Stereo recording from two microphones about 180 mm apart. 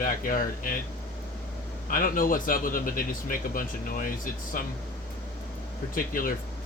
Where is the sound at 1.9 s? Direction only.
50° left (ahead or behind).